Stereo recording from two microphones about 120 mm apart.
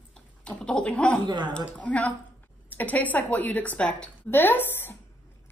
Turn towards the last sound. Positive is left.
turn(degrees=15)  # may be behind; listen again after turning